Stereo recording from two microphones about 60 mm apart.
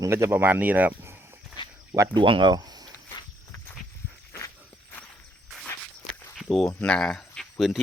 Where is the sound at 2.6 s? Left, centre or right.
Right.